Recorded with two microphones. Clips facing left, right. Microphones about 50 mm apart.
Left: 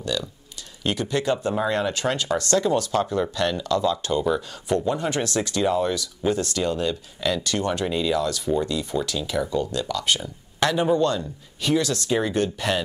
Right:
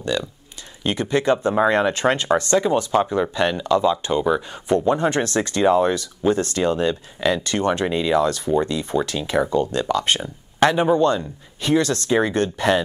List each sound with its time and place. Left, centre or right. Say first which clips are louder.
0.0 s speech: right 4 dB; right